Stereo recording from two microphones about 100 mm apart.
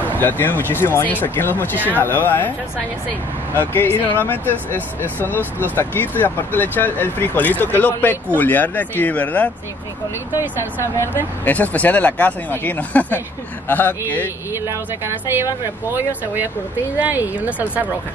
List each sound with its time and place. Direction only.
0.0 s speech: 20° left (ahead or behind)
3.7 s speech: 20° left (ahead or behind)
10.4 s speech: 20° right (ahead or behind)
11.4 s speech: 15° left (ahead or behind)
14.5 s speech: 25° right (ahead or behind)
17.0 s speech: 20° right (ahead or behind)